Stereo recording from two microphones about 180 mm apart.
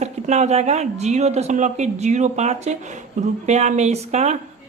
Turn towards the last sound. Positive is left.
turn(degrees=-40)  # may be behind; listen again after turning